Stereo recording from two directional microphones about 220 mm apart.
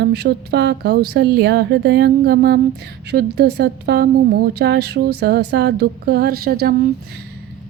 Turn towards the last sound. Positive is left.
turn(degrees=-45)  # may be behind; listen again after turning